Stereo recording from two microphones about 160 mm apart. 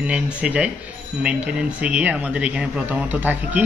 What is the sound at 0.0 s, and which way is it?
A man's voice, 10° right (ahead or behind).